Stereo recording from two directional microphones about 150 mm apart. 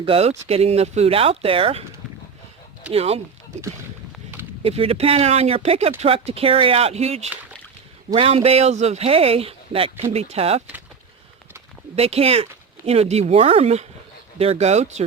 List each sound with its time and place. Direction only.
0.0 s speech: 40° right (ahead or behind)
2.9 s speech: 45° right (ahead or behind)
4.6 s speech: 40° right (ahead or behind)
11.9 s speech: 40° right (ahead or behind)